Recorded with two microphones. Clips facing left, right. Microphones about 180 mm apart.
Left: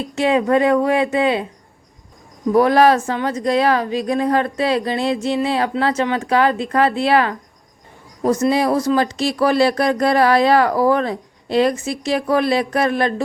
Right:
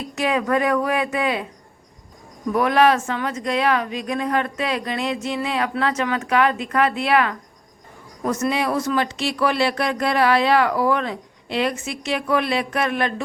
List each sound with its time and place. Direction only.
0.0 s speech: 25° left (ahead or behind)
2.5 s speech: 35° left (ahead or behind)